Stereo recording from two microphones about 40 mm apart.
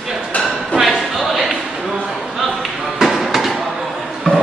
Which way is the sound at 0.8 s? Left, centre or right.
Centre.